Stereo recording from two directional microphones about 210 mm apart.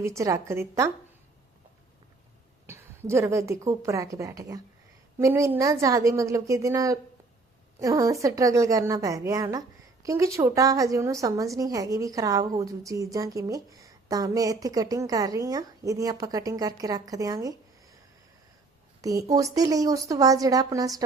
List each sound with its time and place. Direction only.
0.0 s a woman's voice: 15° right (ahead or behind)
2.6 s a woman's voice: 10° right (ahead or behind)
19.0 s a woman's voice: 15° right (ahead or behind)